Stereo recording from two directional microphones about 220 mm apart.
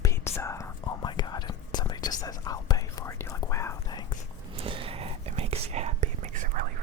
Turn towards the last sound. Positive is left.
turn(degrees=-35)  # may be behind; listen again after turning